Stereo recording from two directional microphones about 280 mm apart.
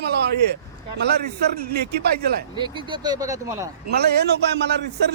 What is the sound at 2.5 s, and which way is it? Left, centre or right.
Speech, centre.